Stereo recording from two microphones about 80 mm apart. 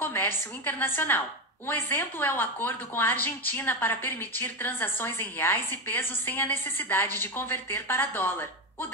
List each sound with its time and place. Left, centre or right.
0.0 s a woman's voice: left